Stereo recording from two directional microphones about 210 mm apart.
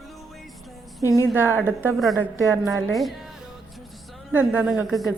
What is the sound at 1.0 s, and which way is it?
Speech, 15° left (ahead or behind).